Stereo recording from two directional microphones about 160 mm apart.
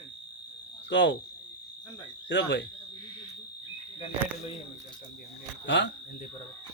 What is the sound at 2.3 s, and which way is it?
Speech, 90° left.